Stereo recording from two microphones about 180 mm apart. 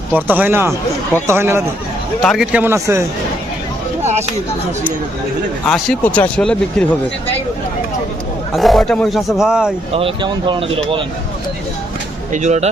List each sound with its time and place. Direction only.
0.1 s a man's voice: 10° right (ahead or behind)
2.2 s a man's voice: centre (ahead or behind); by 3.1 s 15° right (ahead or behind)
5.6 s speech: 5° left (ahead or behind)
8.5 s speech: centre (ahead or behind)
9.9 s speech: 30° right (ahead or behind)
12.3 s speech: 40° right (ahead or behind)